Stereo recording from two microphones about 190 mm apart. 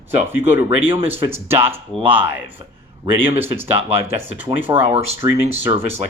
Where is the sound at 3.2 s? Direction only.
10° right (ahead or behind).